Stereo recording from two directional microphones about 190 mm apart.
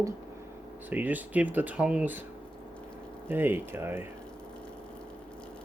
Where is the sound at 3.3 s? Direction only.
10° right (ahead or behind).